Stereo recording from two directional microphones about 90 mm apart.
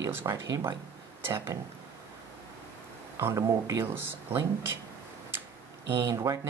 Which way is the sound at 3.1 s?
35° right (ahead or behind).